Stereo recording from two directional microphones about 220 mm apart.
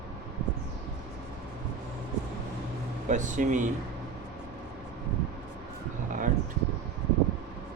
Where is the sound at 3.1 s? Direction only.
35° right (ahead or behind).